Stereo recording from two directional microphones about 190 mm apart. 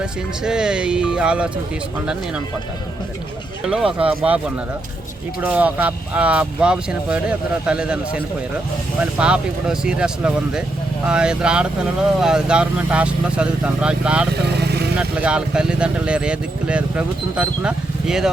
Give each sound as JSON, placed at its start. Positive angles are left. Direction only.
{"t": 0.0, "sound": "speech", "side_deg": -5}
{"t": 3.7, "sound": "speech", "side_deg": -5}
{"t": 14.4, "sound": "vehicle", "side_deg": -60}
{"t": 14.9, "sound": "speech", "side_deg": -5}